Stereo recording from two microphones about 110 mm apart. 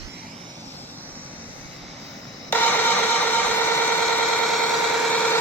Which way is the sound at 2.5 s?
15° left (ahead or behind).